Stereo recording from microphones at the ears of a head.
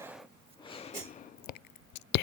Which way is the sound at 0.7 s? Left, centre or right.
Left.